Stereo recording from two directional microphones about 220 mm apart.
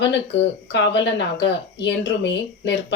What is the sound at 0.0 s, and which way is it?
Speech, 55° left (ahead or behind).